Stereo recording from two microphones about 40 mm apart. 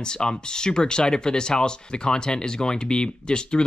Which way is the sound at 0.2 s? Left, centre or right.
Centre.